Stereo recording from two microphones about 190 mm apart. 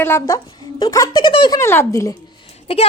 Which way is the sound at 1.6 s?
15° left (ahead or behind).